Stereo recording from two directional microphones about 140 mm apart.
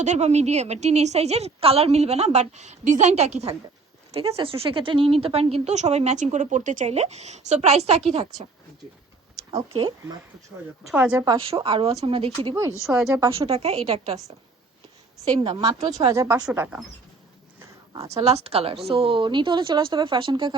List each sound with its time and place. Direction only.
0.0 s a woman's voice: 55° right (ahead or behind)
9.7 s a woman's voice: 35° right (ahead or behind)
10.8 s a woman's voice: 10° right (ahead or behind)
11.3 s a woman's voice: 40° right (ahead or behind)
13.1 s a woman's voice: 20° right (ahead or behind)
13.4 s a woman's voice: 45° right (ahead or behind)
15.5 s a woman's voice: 25° right (ahead or behind); by 16.8 s 10° right (ahead or behind)
17.6 s a sound: 25° right (ahead or behind)
18.2 s a woman's voice: 45° right (ahead or behind)